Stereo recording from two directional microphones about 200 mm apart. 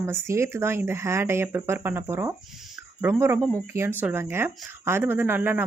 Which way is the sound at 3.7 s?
10° right (ahead or behind).